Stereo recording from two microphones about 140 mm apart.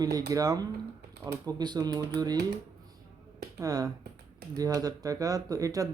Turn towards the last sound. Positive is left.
turn(degrees=-25)  # may be behind; listen again after turning